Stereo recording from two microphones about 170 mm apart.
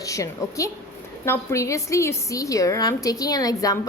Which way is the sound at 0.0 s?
20° left (ahead or behind).